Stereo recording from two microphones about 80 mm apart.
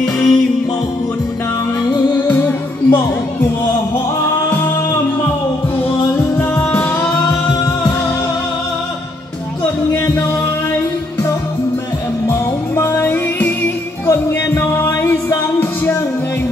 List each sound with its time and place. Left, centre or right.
0.0 s music: centre
2.1 s music: left
12.3 s music: left